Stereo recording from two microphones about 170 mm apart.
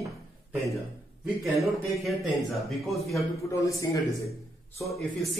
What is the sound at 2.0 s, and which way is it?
A man's voice, centre (ahead or behind).